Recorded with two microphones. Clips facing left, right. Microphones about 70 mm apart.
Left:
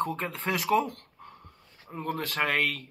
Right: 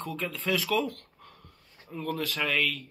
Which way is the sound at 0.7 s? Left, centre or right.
Left.